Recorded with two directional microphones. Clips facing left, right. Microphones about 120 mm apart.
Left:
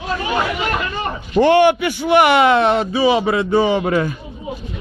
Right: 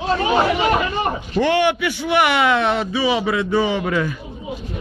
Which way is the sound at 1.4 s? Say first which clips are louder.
Left 5 dB; 45° left (ahead or behind).